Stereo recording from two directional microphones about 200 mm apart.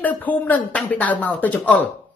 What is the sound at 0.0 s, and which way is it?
Speech, 10° left (ahead or behind).